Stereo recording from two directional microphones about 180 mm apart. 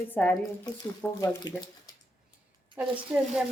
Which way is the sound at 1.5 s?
25° left (ahead or behind).